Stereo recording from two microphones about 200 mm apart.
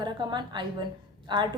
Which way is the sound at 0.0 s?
20° right (ahead or behind).